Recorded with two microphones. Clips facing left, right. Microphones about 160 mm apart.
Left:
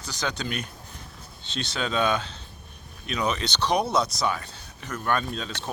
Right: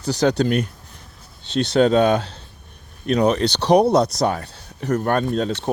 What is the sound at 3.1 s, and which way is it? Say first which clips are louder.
Speech: right 10 dB; 60° right (ahead or behind).